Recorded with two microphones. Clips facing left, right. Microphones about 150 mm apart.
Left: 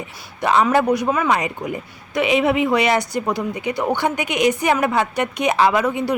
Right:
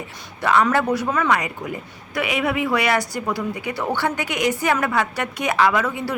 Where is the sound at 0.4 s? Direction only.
20° left (ahead or behind).